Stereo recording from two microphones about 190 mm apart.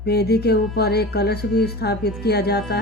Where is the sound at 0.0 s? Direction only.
55° left (ahead or behind).